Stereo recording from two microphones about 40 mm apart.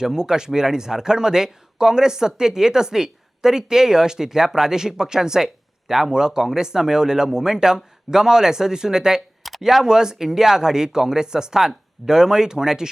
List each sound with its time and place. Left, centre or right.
0.0 s speech: centre
9.4 s speech: centre